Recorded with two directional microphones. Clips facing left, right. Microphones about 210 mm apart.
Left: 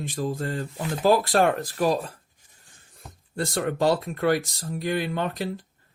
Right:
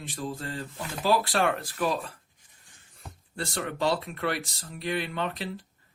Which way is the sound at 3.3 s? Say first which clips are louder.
Left 6 dB; 45° left (ahead or behind).